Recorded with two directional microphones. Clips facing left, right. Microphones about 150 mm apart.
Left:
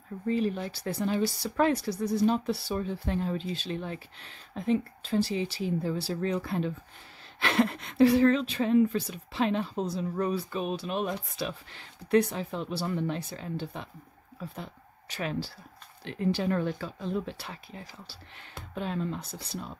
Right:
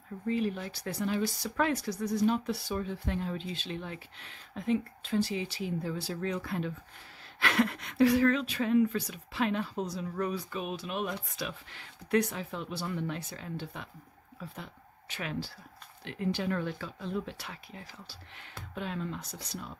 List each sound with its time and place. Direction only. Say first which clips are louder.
0.3 s speech: left 3 dB; 35° left (ahead or behind)